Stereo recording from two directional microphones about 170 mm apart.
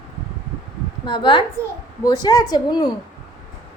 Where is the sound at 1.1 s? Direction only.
30° left (ahead or behind).